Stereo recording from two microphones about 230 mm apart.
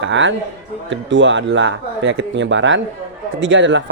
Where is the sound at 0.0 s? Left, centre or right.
Right.